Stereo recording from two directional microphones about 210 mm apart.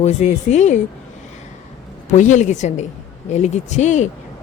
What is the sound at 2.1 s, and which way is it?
Speech, 35° left (ahead or behind).